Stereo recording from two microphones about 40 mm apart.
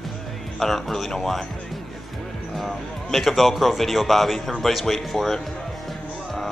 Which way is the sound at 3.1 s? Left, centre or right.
Centre.